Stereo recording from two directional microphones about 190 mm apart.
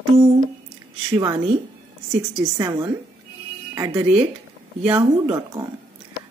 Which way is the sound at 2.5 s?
15° right (ahead or behind).